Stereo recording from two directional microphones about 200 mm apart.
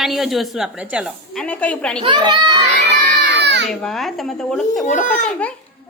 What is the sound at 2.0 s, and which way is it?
Speech, 20° right (ahead or behind).